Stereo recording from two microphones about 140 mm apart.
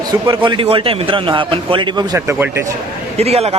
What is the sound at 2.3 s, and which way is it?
Speech, 15° right (ahead or behind).